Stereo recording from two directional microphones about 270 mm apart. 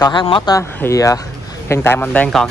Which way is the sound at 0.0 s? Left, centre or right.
Centre.